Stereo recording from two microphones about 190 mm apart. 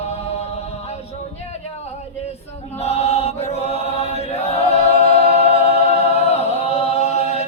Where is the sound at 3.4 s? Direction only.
35° left (ahead or behind).